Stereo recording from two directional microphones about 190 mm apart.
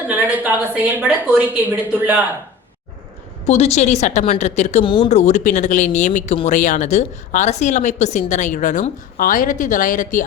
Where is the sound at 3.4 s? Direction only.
35° left (ahead or behind).